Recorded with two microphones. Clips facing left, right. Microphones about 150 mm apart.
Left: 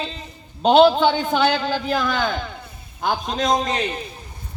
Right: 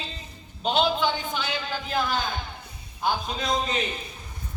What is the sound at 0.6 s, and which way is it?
A man's voice, 70° left (ahead or behind).